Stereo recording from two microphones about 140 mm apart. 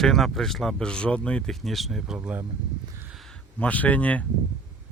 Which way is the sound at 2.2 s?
10° right (ahead or behind).